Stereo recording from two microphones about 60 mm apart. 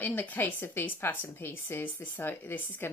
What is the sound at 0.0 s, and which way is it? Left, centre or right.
A woman's voice, left.